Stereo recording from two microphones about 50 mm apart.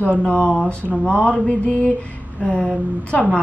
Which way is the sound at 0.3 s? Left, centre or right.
Centre.